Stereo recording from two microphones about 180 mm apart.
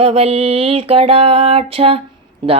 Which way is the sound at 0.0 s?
35° right (ahead or behind).